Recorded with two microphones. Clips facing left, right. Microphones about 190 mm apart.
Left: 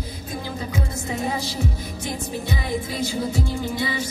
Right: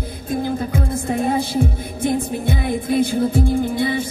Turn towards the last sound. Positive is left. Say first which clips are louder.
# right 7 dB
turn(degrees=-55)  # may be behind; listen again after turning